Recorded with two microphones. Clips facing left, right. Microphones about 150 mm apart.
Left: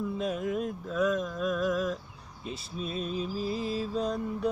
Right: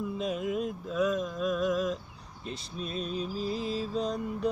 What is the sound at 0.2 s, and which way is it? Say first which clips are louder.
Mantra: right 1 dB; 5° right (ahead or behind).